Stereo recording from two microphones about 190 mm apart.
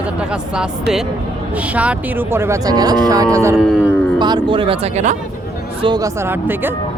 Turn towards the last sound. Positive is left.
turn(degrees=-10)  # may be behind; listen again after turning